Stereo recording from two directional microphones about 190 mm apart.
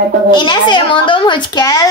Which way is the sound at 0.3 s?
25° left (ahead or behind).